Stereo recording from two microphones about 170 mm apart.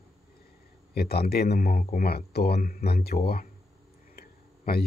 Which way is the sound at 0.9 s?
65° left (ahead or behind).